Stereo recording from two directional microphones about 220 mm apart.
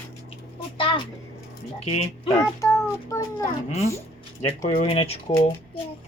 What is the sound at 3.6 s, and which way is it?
A child's voice, 30° left (ahead or behind).